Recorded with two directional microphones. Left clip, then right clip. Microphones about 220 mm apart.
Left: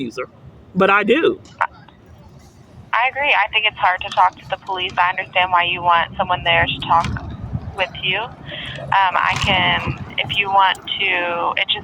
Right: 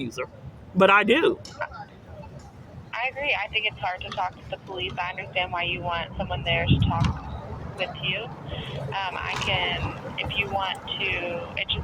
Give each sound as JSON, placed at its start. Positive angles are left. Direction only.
{"t": 0.0, "sound": "a man's voice", "side_deg": 25}
{"t": 2.9, "sound": "speech", "side_deg": 15}